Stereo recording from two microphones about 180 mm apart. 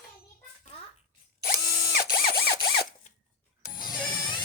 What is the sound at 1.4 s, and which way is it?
Ratchet, 55° left (ahead or behind).